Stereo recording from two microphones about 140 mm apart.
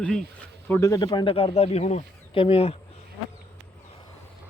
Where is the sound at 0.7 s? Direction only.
20° left (ahead or behind); by 2.7 s 45° left (ahead or behind).